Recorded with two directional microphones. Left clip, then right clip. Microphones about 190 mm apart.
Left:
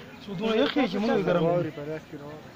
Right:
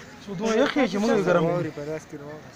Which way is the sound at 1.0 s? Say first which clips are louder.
Right 3 dB; 45° right (ahead or behind).